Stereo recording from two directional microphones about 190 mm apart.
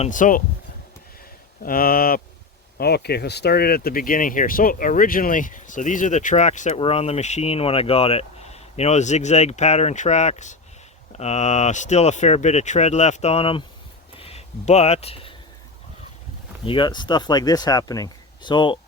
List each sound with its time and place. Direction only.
0.0 s speech: 45° left (ahead or behind)
1.6 s speech: 50° left (ahead or behind); by 13.7 s 30° left (ahead or behind)
14.2 s a sound: 30° left (ahead or behind)
16.6 s speech: 25° left (ahead or behind)